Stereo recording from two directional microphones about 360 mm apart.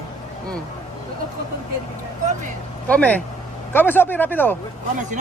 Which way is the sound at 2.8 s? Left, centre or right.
Centre.